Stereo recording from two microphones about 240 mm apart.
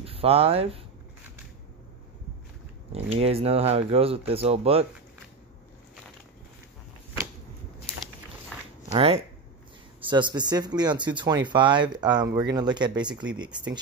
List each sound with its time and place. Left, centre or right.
0.0 s speech: right
2.9 s speech: right
8.9 s speech: right